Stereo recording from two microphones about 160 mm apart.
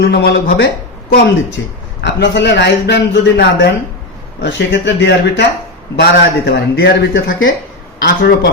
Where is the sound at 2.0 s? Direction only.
90° left.